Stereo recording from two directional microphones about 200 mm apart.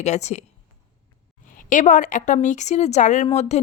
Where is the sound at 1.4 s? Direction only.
40° left (ahead or behind).